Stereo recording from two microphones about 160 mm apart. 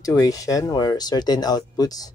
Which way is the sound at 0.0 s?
20° left (ahead or behind).